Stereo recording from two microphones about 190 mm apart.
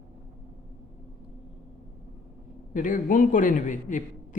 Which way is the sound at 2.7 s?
45° left (ahead or behind).